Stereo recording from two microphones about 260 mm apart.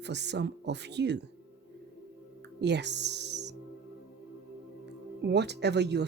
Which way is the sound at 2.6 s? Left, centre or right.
Right.